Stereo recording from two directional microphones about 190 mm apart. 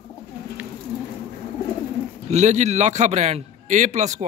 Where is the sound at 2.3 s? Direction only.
35° right (ahead or behind).